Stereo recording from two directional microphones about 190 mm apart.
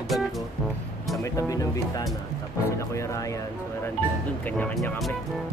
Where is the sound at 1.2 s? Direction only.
20° left (ahead or behind).